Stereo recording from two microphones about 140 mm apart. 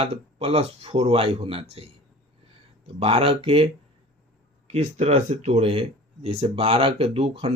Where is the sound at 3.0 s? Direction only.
40° right (ahead or behind).